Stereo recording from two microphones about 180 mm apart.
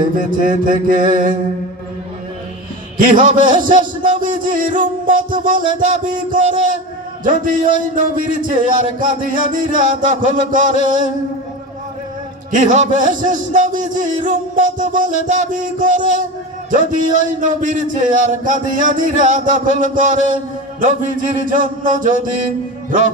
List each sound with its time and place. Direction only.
0.2 s speech: 50° right (ahead or behind)
3.0 s speech: 45° right (ahead or behind)
12.4 s speech: 45° right (ahead or behind)